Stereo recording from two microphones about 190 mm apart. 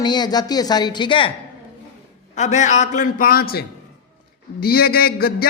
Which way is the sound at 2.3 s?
40° left (ahead or behind).